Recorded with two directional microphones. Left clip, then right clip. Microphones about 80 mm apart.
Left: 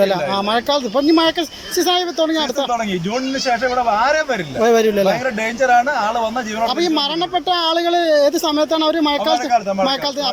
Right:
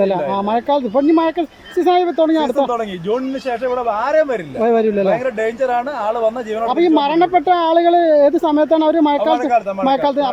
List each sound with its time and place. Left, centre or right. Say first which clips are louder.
0.0 s speech: even; right
3.8 s speech: right 3 dB; right
6.7 s speech: right 5 dB; right